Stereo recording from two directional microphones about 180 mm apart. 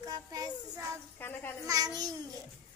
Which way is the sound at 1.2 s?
10° left (ahead or behind).